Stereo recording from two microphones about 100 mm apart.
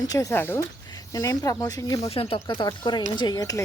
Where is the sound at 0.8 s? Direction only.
40° left (ahead or behind).